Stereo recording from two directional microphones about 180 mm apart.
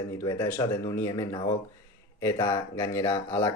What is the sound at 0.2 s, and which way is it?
Speech, 15° left (ahead or behind).